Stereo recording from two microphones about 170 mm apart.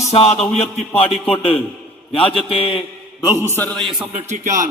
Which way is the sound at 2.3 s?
35° left (ahead or behind).